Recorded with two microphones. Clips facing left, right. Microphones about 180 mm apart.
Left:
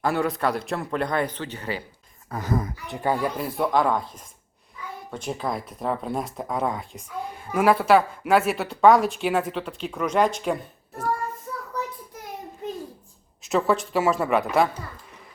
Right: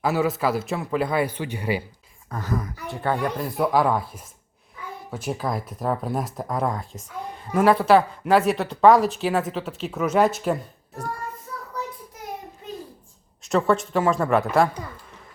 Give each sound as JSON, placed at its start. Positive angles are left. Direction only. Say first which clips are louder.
{"t": 0.0, "sound": "speech", "louder": "right 1 dB", "side_deg": -5}
{"t": 2.5, "sound": "a woman's voice", "louder": "left 2 dB", "side_deg": 25}
{"t": 2.9, "sound": "speech", "louder": "even", "side_deg": 10}
{"t": 13.4, "sound": "speech", "louder": "right 1 dB", "side_deg": 0}